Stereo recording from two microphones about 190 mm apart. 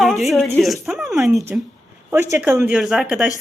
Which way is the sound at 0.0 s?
Centre (ahead or behind).